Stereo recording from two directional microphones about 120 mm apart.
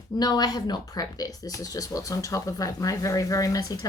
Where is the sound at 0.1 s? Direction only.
35° left (ahead or behind).